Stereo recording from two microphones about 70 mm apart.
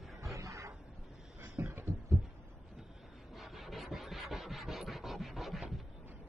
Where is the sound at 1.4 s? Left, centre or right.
Right.